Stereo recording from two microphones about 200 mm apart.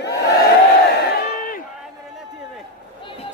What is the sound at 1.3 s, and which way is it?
Crowd, 45° left (ahead or behind).